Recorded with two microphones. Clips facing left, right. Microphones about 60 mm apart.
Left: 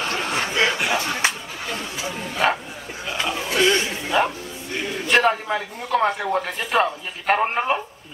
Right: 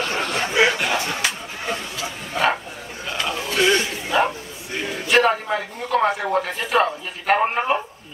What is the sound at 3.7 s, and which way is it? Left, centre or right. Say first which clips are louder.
Speech: right 1 dB; centre.